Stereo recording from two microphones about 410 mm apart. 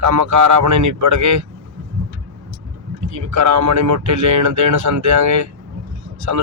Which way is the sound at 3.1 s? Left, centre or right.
Right.